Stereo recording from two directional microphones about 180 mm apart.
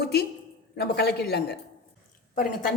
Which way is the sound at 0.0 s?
65° left (ahead or behind).